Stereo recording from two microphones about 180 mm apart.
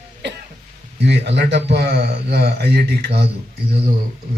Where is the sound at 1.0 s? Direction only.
70° right (ahead or behind).